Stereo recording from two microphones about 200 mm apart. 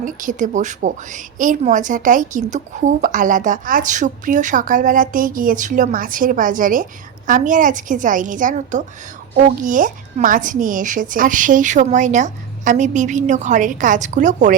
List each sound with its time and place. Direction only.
0.0 s a woman's voice: 40° right (ahead or behind)